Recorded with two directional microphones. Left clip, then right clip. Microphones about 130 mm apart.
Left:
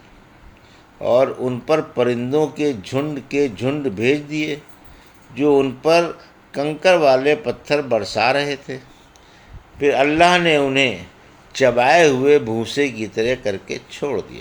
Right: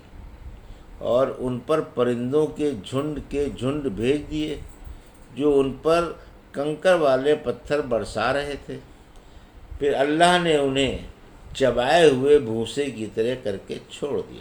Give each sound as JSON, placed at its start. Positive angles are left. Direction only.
{"t": 1.0, "sound": "a man's voice", "side_deg": 30}
{"t": 9.8, "sound": "a man's voice", "side_deg": 40}